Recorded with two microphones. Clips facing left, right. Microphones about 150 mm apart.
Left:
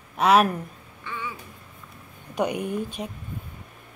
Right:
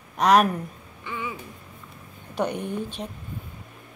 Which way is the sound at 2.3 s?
10° left (ahead or behind).